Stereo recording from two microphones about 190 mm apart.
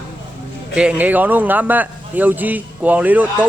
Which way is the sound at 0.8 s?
5° right (ahead or behind).